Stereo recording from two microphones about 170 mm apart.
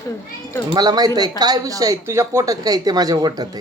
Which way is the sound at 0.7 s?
25° right (ahead or behind).